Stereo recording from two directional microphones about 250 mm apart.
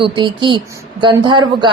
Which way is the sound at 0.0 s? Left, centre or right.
Centre.